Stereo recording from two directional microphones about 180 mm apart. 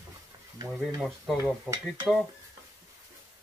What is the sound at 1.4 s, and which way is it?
Speech, 20° right (ahead or behind).